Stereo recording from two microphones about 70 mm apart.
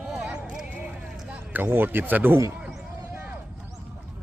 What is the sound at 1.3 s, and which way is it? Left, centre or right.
Speech, right.